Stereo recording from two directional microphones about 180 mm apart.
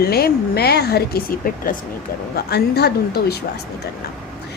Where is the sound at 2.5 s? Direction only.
65° left (ahead or behind).